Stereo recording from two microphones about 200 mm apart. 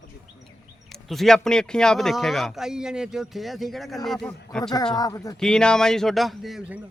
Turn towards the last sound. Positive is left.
turn(degrees=-5)  # may be behind; listen again after turning